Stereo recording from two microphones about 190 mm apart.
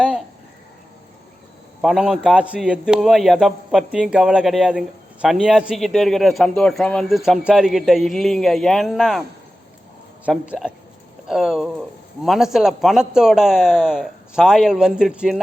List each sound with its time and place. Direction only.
1.8 s a man's voice: centre (ahead or behind)
10.2 s a man's voice: 5° right (ahead or behind)